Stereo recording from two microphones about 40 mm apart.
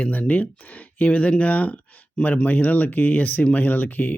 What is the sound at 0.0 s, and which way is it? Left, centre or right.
Speech, left.